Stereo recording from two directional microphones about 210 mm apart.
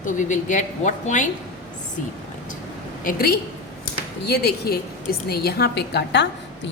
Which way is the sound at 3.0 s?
45° left (ahead or behind).